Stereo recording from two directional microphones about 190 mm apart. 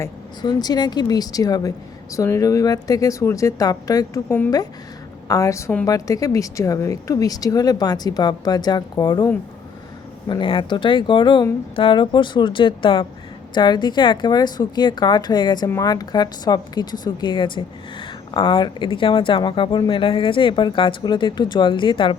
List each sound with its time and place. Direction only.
0.0 s a woman's voice: 20° left (ahead or behind)